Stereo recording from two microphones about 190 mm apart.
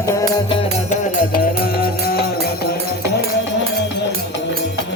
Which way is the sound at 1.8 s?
50° left (ahead or behind).